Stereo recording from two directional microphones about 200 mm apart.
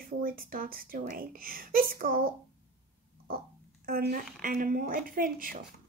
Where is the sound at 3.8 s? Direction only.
50° right (ahead or behind).